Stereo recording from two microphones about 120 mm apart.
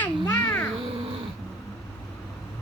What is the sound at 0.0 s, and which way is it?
Babbling, 10° left (ahead or behind).